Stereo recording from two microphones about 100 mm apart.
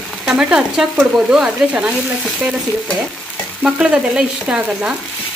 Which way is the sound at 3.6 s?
10° right (ahead or behind).